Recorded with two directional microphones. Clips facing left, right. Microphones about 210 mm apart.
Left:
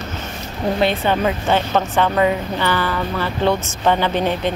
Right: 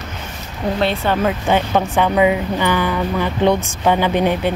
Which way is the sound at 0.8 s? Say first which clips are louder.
Even; centre (ahead or behind).